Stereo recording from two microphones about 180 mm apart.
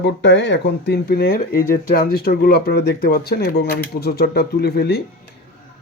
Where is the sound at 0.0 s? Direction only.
75° left (ahead or behind).